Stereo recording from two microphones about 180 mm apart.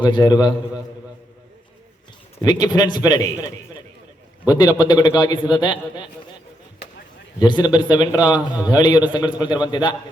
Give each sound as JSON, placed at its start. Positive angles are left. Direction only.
{"t": 0.0, "sound": "a man's voice", "side_deg": 25}
{"t": 2.4, "sound": "a man's voice", "side_deg": 20}
{"t": 7.3, "sound": "a man's voice", "side_deg": 25}